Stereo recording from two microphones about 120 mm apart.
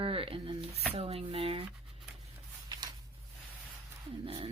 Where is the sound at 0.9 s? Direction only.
55° right (ahead or behind).